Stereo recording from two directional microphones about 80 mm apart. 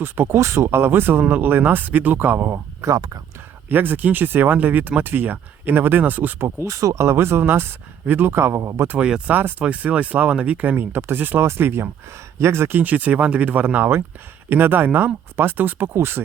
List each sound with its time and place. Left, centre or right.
0.0 s speech: right
6.6 s speech: right
8.9 s speech: centre; by 16.2 s right